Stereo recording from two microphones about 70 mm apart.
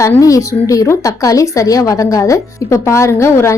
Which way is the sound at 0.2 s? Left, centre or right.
Left.